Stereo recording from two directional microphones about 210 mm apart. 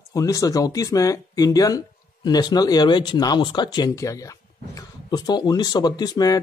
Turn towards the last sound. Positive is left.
turn(degrees=20)  # may be behind; listen again after turning